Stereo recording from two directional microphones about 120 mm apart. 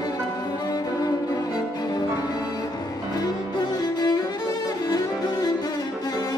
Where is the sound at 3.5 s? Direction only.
35° left (ahead or behind).